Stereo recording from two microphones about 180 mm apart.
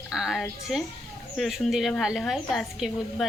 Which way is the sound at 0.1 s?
Centre (ahead or behind).